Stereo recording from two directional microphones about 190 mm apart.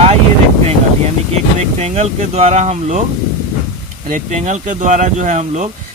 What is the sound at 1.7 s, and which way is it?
Speech, 35° right (ahead or behind).